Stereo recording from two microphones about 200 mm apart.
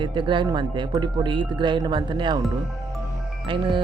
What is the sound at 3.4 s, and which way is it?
Speech, 25° right (ahead or behind).